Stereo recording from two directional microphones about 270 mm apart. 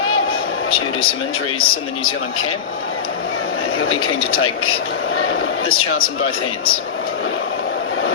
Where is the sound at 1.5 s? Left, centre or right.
Left.